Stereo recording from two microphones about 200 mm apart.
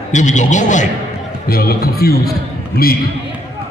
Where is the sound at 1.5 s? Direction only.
50° left (ahead or behind).